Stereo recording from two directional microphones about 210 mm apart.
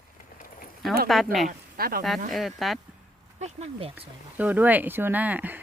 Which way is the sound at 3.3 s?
30° right (ahead or behind).